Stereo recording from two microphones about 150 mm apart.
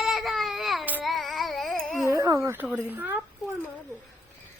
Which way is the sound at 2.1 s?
20° right (ahead or behind).